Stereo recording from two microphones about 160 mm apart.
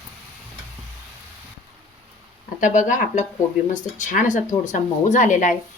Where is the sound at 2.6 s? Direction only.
50° left (ahead or behind).